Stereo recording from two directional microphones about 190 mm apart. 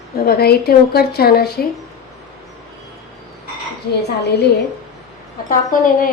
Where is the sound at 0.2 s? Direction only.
55° left (ahead or behind).